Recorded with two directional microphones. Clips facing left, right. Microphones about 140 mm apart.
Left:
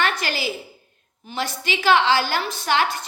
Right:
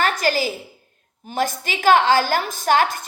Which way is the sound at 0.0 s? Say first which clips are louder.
Right 4 dB; 40° right (ahead or behind).